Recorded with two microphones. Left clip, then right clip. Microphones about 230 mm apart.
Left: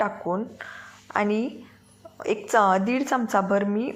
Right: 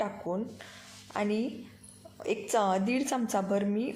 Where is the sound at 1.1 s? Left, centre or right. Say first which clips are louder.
Left 7 dB; centre.